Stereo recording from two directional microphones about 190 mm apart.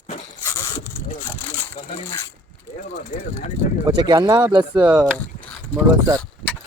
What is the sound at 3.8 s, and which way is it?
Speech, 25° right (ahead or behind).